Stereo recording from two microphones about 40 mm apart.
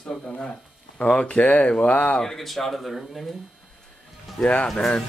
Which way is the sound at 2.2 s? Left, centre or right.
Centre.